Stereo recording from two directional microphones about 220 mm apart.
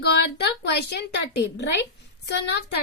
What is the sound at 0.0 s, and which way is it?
A woman's voice, 50° left (ahead or behind).